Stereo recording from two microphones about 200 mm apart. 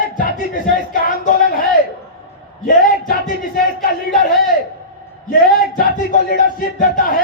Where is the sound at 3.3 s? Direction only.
45° left (ahead or behind).